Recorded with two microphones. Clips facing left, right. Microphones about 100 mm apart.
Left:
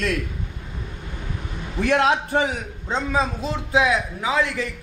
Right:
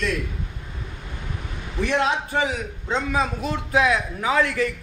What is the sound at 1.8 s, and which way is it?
A man's voice, 50° left (ahead or behind).